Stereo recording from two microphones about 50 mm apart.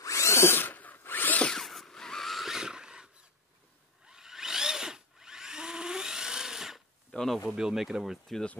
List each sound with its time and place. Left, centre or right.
0.1 s drill: left
0.6 s drill: left
1.6 s a sound: centre
4.1 s drill: centre
7.1 s a sound: centre
7.5 s speech: centre